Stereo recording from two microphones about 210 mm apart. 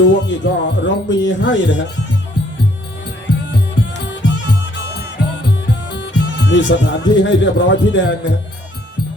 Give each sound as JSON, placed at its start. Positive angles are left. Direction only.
{"t": 0.0, "sound": "music", "side_deg": 60}
{"t": 3.8, "sound": "music", "side_deg": 60}
{"t": 5.9, "sound": "speech", "side_deg": 55}